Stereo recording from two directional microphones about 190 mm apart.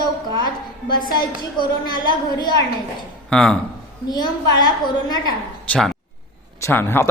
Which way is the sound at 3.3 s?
5° left (ahead or behind).